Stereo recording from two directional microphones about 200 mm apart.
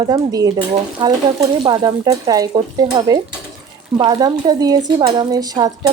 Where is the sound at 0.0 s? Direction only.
20° right (ahead or behind).